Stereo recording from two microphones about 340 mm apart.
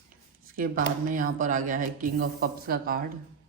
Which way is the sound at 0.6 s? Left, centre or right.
Right.